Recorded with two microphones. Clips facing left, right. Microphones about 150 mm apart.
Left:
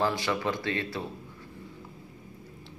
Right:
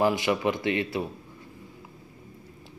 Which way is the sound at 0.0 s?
15° right (ahead or behind).